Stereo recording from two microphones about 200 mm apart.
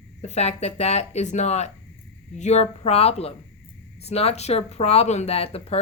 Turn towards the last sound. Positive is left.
turn(degrees=30)  # may be behind; listen again after turning